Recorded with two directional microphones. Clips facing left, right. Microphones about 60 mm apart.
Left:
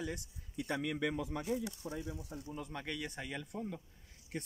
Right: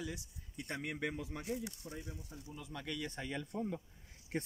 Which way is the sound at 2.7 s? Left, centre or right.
Left.